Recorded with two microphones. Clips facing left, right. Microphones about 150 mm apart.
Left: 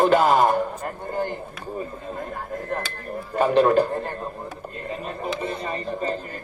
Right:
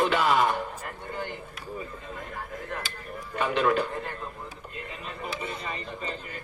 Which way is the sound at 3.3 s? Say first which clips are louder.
Left 8 dB; 40° left (ahead or behind).